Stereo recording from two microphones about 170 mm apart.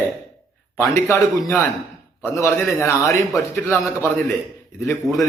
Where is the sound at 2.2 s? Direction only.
15° left (ahead or behind).